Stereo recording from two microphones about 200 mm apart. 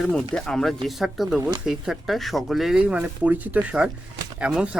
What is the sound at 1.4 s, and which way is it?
Speech, 20° right (ahead or behind).